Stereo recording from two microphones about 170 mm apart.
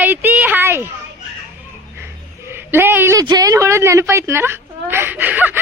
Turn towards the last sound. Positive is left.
turn(degrees=-10)  # may be behind; listen again after turning